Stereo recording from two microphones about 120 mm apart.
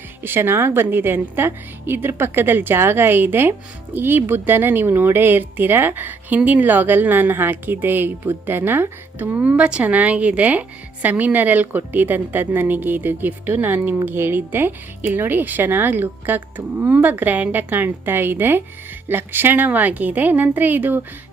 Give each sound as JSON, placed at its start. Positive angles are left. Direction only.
{"t": 0.2, "sound": "a woman's voice", "side_deg": -20}